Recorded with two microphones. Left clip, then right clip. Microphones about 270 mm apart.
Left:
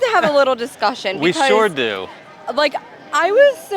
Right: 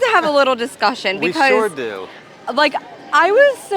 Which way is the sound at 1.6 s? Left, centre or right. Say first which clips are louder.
Left 3 dB; left.